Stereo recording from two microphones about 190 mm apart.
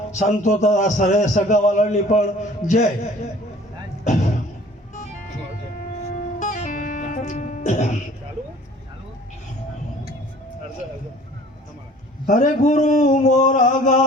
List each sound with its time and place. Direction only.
0.1 s a man's voice: 40° left (ahead or behind)
4.0 s a sound: 40° left (ahead or behind)
6.4 s music: 40° left (ahead or behind)
12.2 s a man's voice: 40° left (ahead or behind)